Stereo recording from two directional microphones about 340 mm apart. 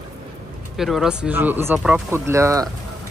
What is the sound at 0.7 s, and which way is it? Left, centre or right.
Speech, centre.